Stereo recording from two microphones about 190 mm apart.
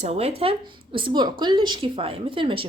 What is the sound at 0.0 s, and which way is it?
Speech, 35° right (ahead or behind).